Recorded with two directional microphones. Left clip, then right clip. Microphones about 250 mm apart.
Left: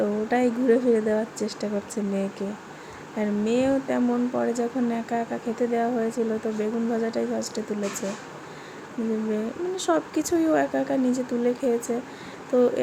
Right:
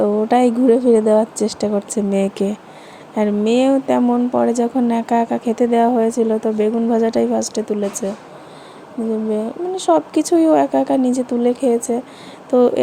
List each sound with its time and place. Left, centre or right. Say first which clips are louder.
0.0 s a woman's voice: right 9 dB; right
3.2 s speech: right 9 dB; right
9.3 s speech: right 7 dB; right